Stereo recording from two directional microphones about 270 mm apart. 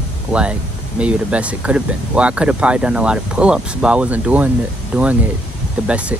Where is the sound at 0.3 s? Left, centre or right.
Centre.